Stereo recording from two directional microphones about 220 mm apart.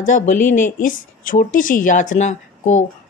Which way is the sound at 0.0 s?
35° left (ahead or behind).